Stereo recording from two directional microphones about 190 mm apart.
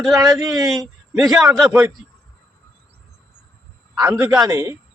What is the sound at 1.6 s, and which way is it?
Speech, 5° right (ahead or behind).